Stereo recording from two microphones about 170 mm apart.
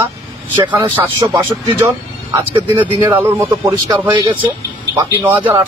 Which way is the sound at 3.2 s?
15° right (ahead or behind).